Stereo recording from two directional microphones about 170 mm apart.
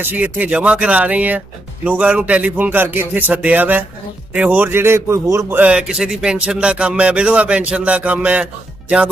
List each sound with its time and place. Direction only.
0.0 s a man's voice: 10° right (ahead or behind)